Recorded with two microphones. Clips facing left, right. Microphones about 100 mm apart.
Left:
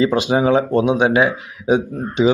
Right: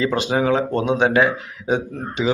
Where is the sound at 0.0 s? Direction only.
15° left (ahead or behind).